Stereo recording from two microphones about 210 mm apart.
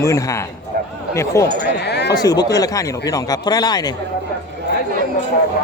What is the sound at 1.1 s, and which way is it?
Speech, 15° left (ahead or behind).